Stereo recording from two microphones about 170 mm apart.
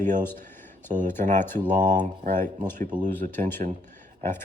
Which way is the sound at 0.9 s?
45° right (ahead or behind).